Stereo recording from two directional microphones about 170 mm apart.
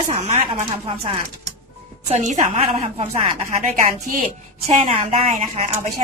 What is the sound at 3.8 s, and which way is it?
A woman's voice, 50° right (ahead or behind).